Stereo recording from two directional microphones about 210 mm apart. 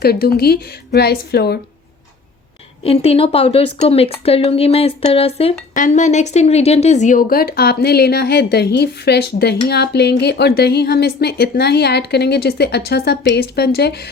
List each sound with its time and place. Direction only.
0.0 s a woman's voice: 45° left (ahead or behind)
2.8 s a woman's voice: 30° left (ahead or behind); by 14.1 s 50° left (ahead or behind)